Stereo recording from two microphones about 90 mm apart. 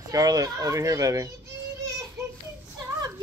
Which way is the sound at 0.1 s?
40° right (ahead or behind).